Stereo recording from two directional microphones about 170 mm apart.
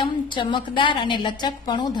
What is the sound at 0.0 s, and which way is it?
A woman's voice, 30° left (ahead or behind).